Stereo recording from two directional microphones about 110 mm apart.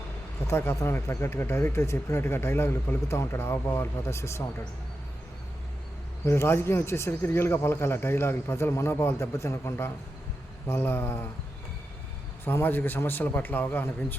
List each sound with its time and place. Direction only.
0.4 s speech: 25° left (ahead or behind)
6.2 s speech: 25° left (ahead or behind)
12.5 s a man's voice: 20° left (ahead or behind)